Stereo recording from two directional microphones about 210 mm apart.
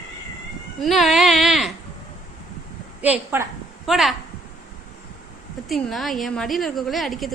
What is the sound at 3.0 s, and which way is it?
A woman's voice, 10° right (ahead or behind).